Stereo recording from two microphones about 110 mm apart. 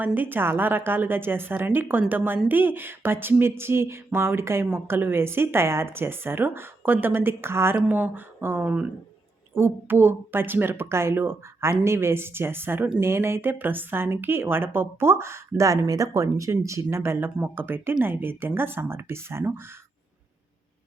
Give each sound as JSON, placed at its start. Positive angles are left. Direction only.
{"t": 0.0, "sound": "speech", "side_deg": -15}